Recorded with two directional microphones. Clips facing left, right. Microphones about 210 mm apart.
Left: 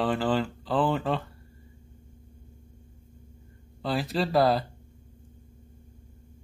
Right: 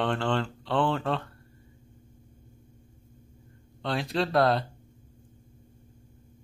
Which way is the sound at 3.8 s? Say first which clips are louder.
Left 1 dB; centre (ahead or behind).